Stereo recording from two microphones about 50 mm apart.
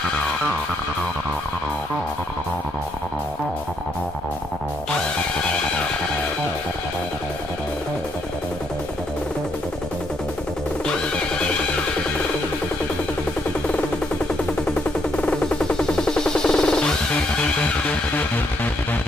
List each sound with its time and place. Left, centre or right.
15.1 s music: left
15.6 s music: centre